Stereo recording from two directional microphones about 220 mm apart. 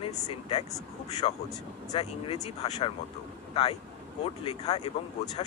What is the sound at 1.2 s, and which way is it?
Speech, 25° left (ahead or behind).